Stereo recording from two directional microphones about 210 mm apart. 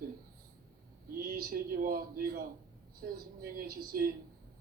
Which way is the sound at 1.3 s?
45° right (ahead or behind).